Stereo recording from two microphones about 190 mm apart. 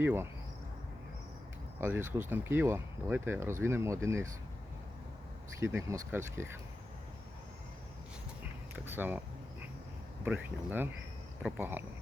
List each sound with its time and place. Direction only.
0.0 s speech: 10° right (ahead or behind)
1.8 s speech: 10° right (ahead or behind)
5.5 s speech: 15° right (ahead or behind)
8.7 s speech: 10° right (ahead or behind)
10.2 s speech: 10° right (ahead or behind)